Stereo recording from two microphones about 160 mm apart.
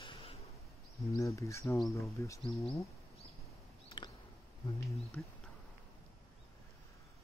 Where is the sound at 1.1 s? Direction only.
20° left (ahead or behind).